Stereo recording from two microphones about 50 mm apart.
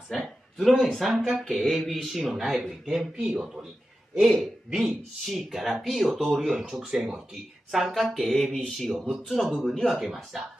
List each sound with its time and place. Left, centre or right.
0.1 s speech: centre
1.4 s speech: centre
4.2 s speech: centre
7.7 s speech: centre
8.9 s speech: centre